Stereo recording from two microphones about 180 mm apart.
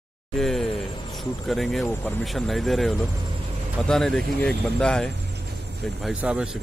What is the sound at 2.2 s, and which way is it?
Speech, centre (ahead or behind).